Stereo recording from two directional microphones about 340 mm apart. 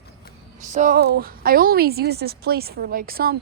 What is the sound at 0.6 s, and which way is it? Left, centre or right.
A woman's voice, right.